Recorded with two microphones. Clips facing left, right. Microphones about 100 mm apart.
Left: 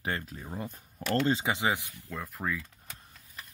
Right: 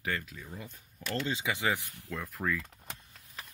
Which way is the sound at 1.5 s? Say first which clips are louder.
Left 2 dB; 20° left (ahead or behind).